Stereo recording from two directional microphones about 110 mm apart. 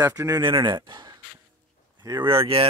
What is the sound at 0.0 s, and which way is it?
Speech, 30° right (ahead or behind).